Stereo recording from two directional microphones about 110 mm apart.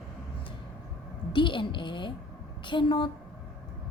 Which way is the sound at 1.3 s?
50° left (ahead or behind).